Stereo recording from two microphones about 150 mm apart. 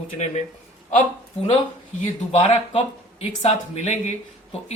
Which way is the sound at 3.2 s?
45° left (ahead or behind).